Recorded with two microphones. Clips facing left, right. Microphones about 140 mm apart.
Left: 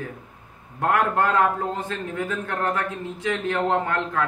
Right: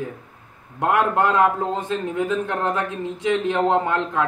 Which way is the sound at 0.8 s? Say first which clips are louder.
Right 2 dB; 15° right (ahead or behind).